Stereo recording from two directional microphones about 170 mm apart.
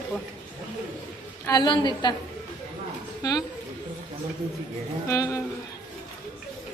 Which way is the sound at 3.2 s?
20° left (ahead or behind).